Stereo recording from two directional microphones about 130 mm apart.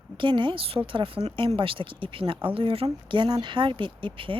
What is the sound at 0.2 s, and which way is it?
Speech, 40° right (ahead or behind).